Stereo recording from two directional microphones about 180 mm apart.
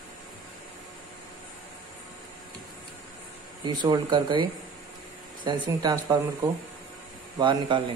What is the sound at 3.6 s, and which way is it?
Speech, 25° right (ahead or behind).